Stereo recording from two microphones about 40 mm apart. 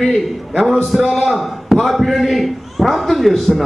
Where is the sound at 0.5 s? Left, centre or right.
Centre.